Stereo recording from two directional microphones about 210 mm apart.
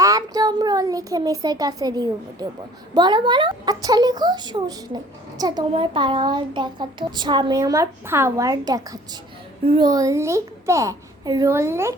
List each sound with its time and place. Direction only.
0.0 s a child's voice: 15° right (ahead or behind)